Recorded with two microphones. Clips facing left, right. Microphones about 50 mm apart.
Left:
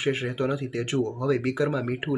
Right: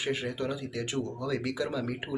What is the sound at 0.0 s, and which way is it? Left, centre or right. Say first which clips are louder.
Speech: left 5 dB; left.